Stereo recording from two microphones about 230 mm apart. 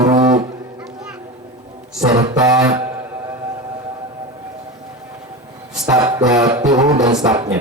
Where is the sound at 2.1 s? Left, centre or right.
Centre.